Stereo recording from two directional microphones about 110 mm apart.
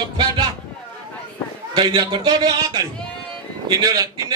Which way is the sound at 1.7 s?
45° right (ahead or behind).